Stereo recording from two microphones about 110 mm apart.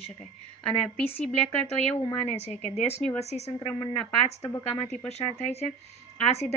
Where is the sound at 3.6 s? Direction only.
60° left (ahead or behind).